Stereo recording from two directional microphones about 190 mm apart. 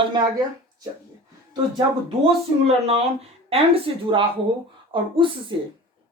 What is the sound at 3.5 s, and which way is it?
Speech, 30° right (ahead or behind).